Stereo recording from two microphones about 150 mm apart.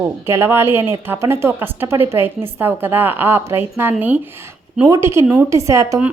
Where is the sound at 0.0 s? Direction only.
15° right (ahead or behind).